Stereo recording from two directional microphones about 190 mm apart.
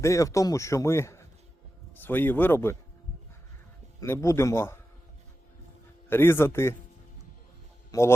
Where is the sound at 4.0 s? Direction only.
15° left (ahead or behind).